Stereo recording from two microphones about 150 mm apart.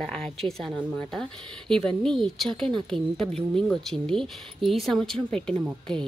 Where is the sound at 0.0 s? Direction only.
5° left (ahead or behind).